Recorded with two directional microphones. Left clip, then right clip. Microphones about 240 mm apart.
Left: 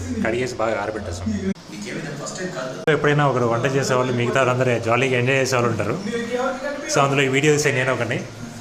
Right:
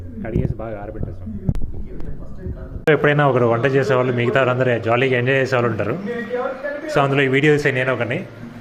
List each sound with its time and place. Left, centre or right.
0.2 s speech: centre
2.8 s speech: centre